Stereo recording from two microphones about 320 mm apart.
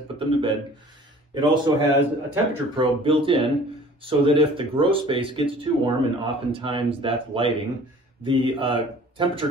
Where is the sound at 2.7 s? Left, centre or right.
Centre.